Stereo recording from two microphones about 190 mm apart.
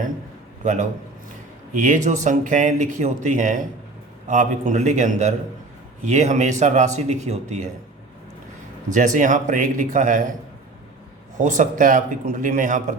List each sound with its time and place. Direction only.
0.6 s a man's voice: 40° right (ahead or behind)
8.9 s a man's voice: 40° right (ahead or behind)
11.3 s a man's voice: 40° right (ahead or behind)